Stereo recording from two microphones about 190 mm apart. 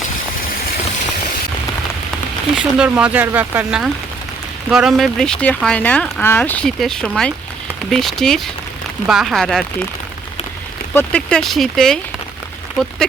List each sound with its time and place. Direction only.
2.6 s speech: 5° right (ahead or behind)
10.9 s speech: 5° left (ahead or behind)